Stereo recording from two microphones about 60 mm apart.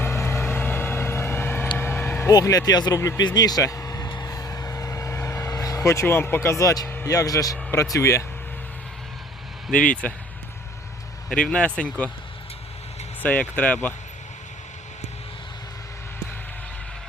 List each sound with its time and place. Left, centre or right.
0.0 s vehicle: left
1.8 s a sound: left
2.4 s speech: left
3.2 s vehicle: left
5.5 s speech: left
6.8 s vehicle: left
7.1 s speech: left
7.9 s speech: left
9.7 s speech: left
11.3 s speech: centre
13.2 s speech: left